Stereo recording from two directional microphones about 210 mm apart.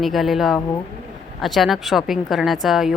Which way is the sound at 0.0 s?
Centre (ahead or behind).